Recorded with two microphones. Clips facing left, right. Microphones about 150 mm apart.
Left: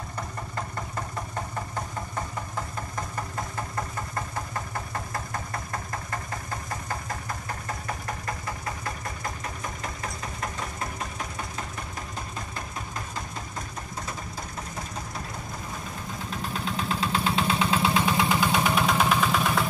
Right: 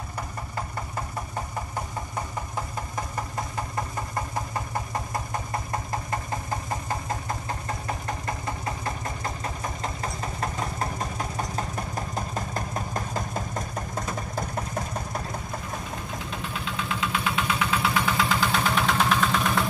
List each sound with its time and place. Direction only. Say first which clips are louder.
16.6 s vehicle: left 2 dB; 35° left (ahead or behind); by 19.7 s 5° left (ahead or behind)